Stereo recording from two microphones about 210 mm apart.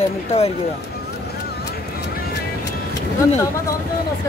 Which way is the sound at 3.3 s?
15° left (ahead or behind).